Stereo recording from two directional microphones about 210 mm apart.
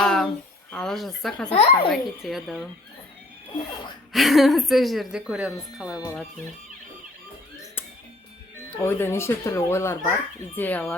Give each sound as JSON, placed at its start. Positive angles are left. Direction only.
{"t": 0.0, "sound": "a sound", "side_deg": 5}
{"t": 0.7, "sound": "speech", "side_deg": 5}
{"t": 1.5, "sound": "a child's voice", "side_deg": 30}
{"t": 1.9, "sound": "a woman's voice", "side_deg": 0}
{"t": 4.1, "sound": "a woman's voice", "side_deg": 0}
{"t": 8.8, "sound": "speech", "side_deg": 10}